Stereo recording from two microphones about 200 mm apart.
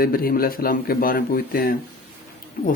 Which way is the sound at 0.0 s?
45° left (ahead or behind).